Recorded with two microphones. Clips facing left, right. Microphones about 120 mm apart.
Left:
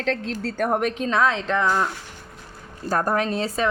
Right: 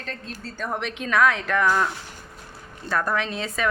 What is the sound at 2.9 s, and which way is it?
Speech, 40° left (ahead or behind).